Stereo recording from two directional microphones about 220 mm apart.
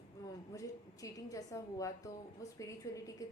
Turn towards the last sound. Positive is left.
turn(degrees=15)  # may be behind; listen again after turning